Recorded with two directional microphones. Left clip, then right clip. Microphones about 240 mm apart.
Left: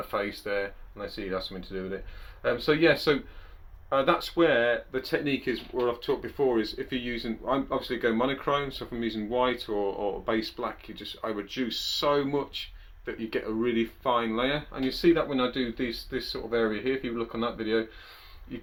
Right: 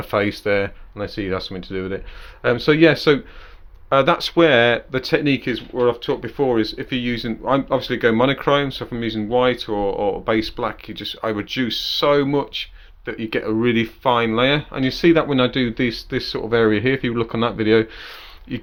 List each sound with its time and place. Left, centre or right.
0.1 s speech: right